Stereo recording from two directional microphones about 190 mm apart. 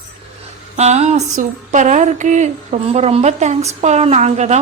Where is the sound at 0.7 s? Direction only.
35° right (ahead or behind).